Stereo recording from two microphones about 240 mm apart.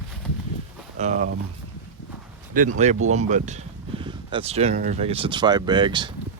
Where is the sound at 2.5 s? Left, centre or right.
Right.